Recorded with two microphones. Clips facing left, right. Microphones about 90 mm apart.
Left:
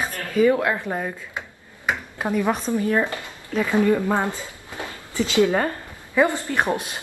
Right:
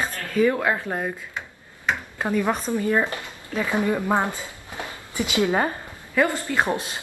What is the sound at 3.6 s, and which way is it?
Speech, 20° right (ahead or behind).